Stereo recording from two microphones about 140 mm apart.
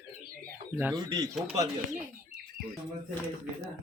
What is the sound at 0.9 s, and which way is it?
Speech, 25° right (ahead or behind).